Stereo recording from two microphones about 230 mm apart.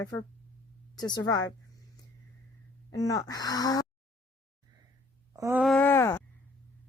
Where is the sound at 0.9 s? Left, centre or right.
Centre.